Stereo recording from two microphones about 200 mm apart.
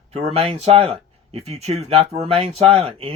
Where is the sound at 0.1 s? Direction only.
30° right (ahead or behind).